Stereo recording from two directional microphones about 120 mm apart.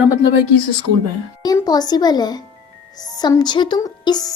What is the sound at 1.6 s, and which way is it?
A woman's voice, 35° left (ahead or behind).